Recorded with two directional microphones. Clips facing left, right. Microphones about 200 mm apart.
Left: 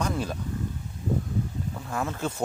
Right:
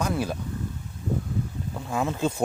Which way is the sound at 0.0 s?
10° right (ahead or behind).